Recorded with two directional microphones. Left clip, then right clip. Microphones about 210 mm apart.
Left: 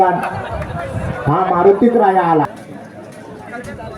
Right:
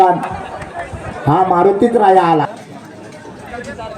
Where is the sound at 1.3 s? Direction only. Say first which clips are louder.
Right 1 dB; 45° right (ahead or behind).